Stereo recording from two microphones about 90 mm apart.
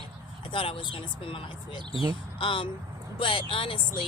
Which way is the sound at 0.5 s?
80° left.